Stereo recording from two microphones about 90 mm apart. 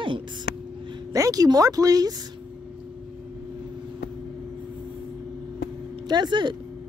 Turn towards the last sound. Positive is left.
turn(degrees=-60)  # may be behind; listen again after turning